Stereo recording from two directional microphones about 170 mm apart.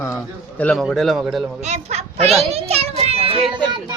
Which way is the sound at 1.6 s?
40° right (ahead or behind).